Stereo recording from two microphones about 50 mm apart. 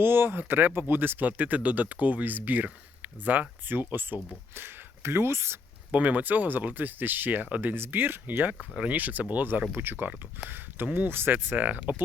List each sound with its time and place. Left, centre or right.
0.0 s speech: right
4.5 s speech: right
5.9 s speech: right
9.7 s speech: right
11.5 s speech: right